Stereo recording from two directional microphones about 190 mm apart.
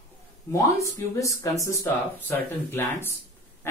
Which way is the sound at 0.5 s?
15° left (ahead or behind).